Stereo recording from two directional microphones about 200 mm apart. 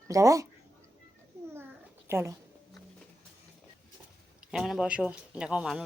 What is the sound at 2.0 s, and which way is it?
Speech, 15° right (ahead or behind).